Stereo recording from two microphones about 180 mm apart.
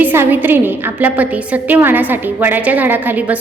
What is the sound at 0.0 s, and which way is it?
A woman's voice, 10° right (ahead or behind).